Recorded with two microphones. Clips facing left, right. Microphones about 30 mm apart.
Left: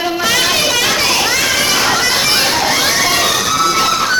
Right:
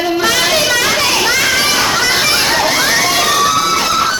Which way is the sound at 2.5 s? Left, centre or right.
Centre.